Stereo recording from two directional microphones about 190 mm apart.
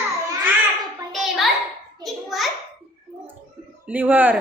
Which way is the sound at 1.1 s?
Centre (ahead or behind).